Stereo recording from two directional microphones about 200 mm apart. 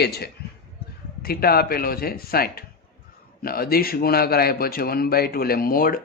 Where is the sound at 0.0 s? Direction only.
55° left (ahead or behind).